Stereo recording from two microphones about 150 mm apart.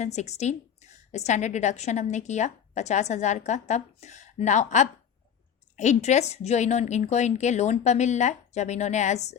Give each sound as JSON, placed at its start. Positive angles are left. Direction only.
{"t": 0.0, "sound": "a woman's voice", "side_deg": 50}